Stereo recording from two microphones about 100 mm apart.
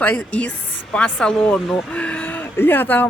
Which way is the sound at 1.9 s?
15° left (ahead or behind).